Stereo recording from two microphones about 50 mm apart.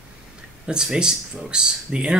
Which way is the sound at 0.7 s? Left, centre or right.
Centre.